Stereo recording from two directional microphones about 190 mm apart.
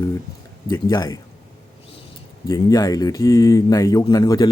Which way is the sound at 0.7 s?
20° left (ahead or behind).